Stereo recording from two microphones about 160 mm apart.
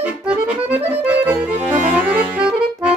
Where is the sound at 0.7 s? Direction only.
10° right (ahead or behind).